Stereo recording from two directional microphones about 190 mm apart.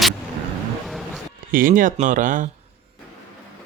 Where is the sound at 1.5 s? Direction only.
45° right (ahead or behind).